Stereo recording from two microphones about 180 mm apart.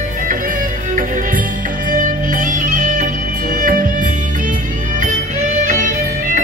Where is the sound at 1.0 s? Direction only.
50° right (ahead or behind).